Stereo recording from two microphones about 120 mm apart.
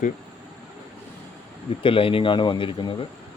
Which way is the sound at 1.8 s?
50° left (ahead or behind).